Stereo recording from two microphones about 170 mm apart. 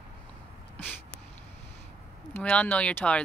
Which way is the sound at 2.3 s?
5° left (ahead or behind).